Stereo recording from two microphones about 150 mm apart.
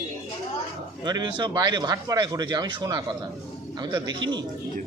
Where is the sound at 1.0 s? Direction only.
30° right (ahead or behind).